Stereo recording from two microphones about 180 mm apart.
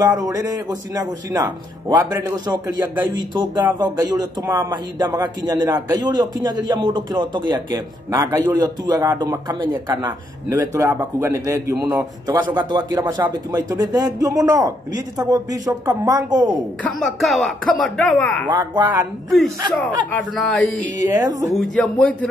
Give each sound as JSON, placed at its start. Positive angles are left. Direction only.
{"t": 0.2, "sound": "a man's voice", "side_deg": -20}
{"t": 16.8, "sound": "speech", "side_deg": 0}
{"t": 18.5, "sound": "a man's voice", "side_deg": -25}
{"t": 20.3, "sound": "speech", "side_deg": 5}
{"t": 21.0, "sound": "a man's voice", "side_deg": -20}
{"t": 21.5, "sound": "speech", "side_deg": 0}